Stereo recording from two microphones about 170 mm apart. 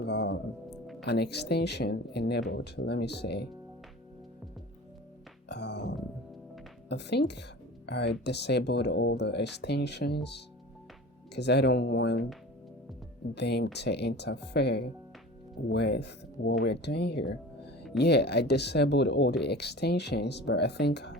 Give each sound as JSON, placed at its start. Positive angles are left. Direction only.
{"t": 0.0, "sound": "speech", "side_deg": 80}
{"t": 5.5, "sound": "music", "side_deg": 85}
{"t": 6.8, "sound": "speech", "side_deg": 85}
{"t": 13.3, "sound": "speech", "side_deg": 75}